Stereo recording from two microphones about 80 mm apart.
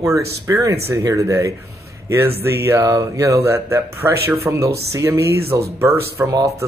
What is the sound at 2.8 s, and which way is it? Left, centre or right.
Speech, right.